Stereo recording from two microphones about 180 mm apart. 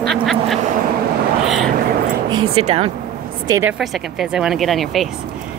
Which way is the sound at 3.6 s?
5° right (ahead or behind).